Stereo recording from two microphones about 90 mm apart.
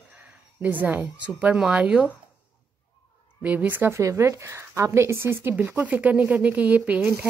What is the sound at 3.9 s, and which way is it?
Speech, 35° right (ahead or behind).